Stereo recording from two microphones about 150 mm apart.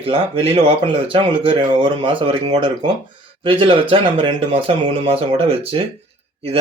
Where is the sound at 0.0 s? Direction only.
40° right (ahead or behind).